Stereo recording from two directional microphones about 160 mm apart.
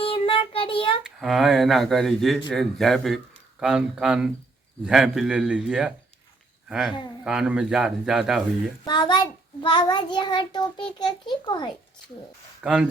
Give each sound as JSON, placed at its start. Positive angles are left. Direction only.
{"t": 0.0, "sound": "child singing", "side_deg": 35}
{"t": 1.0, "sound": "speech", "side_deg": 0}
{"t": 8.8, "sound": "a child's voice", "side_deg": 30}
{"t": 12.6, "sound": "speech", "side_deg": -5}